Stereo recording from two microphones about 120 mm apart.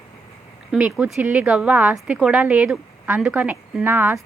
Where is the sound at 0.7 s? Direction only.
10° right (ahead or behind).